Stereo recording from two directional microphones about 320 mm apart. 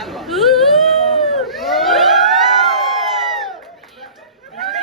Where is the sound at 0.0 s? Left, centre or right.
Centre.